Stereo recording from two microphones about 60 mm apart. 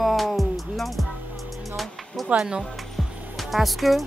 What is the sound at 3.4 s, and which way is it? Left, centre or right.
Speech, centre.